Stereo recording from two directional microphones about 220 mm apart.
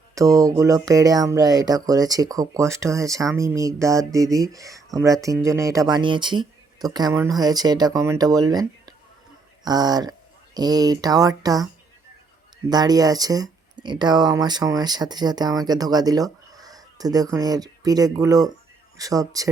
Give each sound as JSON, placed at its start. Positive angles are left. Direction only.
{"t": 0.1, "sound": "speech", "side_deg": -15}
{"t": 12.7, "sound": "speech", "side_deg": -15}